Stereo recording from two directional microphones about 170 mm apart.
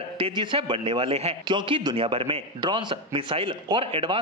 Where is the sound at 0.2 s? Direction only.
30° right (ahead or behind).